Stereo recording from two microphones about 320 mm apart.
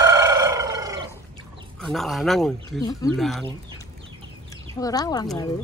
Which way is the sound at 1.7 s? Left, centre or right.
Centre.